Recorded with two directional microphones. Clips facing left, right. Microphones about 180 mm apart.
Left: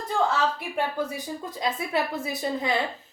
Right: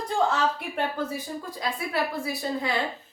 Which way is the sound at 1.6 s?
20° left (ahead or behind).